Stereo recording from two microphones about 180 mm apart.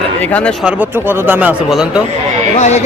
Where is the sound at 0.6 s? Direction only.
10° right (ahead or behind).